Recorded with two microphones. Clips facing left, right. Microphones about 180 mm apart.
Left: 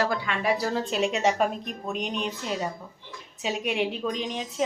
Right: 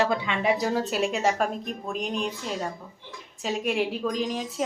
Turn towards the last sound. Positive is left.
turn(degrees=-5)  # may be behind; listen again after turning